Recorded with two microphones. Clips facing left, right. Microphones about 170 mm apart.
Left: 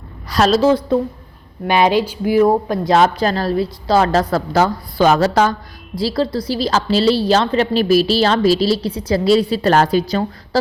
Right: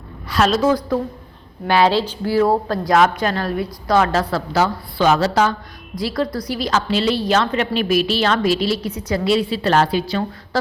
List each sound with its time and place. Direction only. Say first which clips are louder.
0.3 s a woman's voice: left 3 dB; 40° left (ahead or behind); by 2.9 s 15° left (ahead or behind)
2.9 s a woman's voice: left 2 dB; 35° left (ahead or behind)
6.0 s a woman's voice: left 3 dB; 30° left (ahead or behind)